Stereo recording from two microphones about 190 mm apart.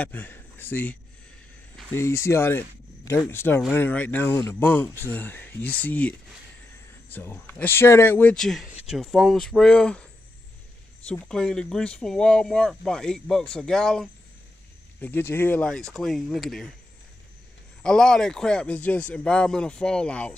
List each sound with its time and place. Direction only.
0.0 s a man's voice: 10° left (ahead or behind)
17.8 s speech: 5° left (ahead or behind)